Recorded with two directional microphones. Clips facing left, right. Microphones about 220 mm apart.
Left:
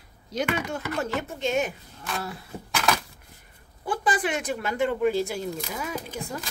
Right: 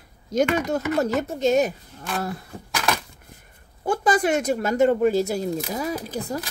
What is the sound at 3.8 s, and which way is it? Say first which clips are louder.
Speech: right 6 dB; 45° right (ahead or behind).